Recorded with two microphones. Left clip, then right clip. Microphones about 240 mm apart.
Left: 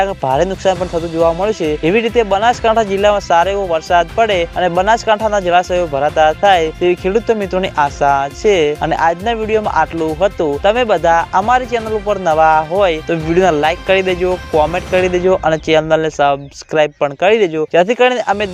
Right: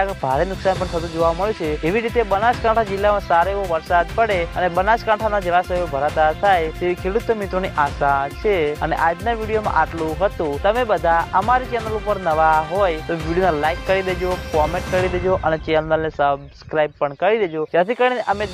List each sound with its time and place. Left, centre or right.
0.0 s speech: left